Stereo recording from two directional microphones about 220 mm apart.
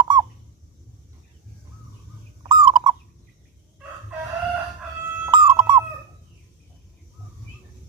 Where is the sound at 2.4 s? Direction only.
20° right (ahead or behind).